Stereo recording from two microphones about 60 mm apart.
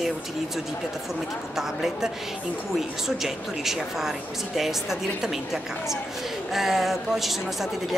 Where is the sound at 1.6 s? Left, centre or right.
Centre.